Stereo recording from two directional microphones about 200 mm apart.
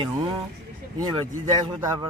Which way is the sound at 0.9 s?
25° right (ahead or behind).